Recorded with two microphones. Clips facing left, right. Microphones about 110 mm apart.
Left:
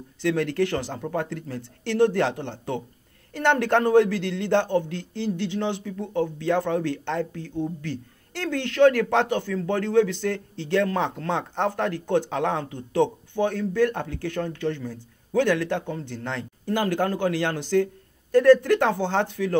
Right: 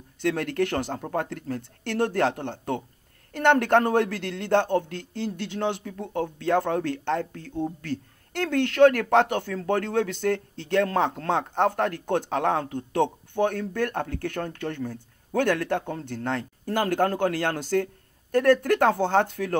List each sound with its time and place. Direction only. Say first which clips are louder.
0.2 s speech: left 2 dB; 50° right (ahead or behind)
4.6 s speech: left 1 dB; 55° right (ahead or behind)